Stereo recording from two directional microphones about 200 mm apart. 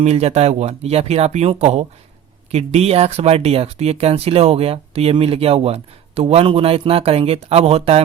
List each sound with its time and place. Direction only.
0.0 s speech: 30° right (ahead or behind)